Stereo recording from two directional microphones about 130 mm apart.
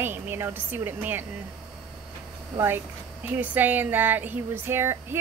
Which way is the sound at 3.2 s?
15° right (ahead or behind).